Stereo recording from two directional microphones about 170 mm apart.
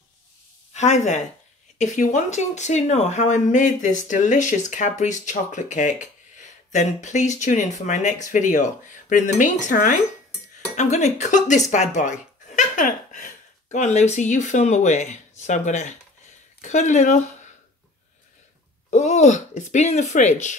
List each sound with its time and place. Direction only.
0.7 s speech: 45° left (ahead or behind)
18.9 s speech: 45° left (ahead or behind)